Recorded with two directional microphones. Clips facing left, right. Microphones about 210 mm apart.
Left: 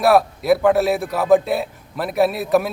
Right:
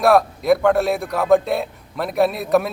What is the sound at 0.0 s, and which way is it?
A man's voice, centre (ahead or behind).